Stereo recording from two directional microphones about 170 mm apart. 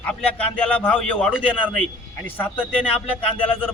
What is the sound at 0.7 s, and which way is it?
A man's voice, 10° left (ahead or behind).